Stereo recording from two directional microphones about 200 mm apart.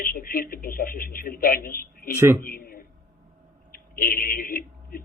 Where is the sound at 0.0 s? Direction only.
45° left (ahead or behind).